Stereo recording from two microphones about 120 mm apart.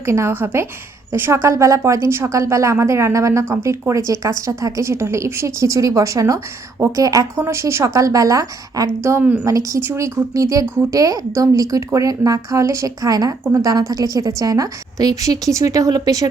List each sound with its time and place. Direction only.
0.0 s speech: 20° right (ahead or behind)
9.4 s speech: 25° right (ahead or behind)